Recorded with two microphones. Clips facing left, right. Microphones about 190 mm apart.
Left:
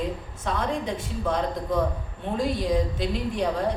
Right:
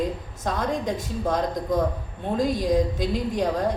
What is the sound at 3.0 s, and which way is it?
Speech, 45° right (ahead or behind).